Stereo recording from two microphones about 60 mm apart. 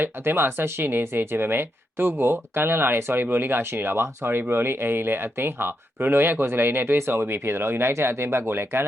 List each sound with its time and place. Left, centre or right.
0.0 s speech: right